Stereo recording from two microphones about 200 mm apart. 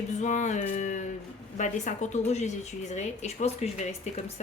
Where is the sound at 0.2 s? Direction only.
40° left (ahead or behind).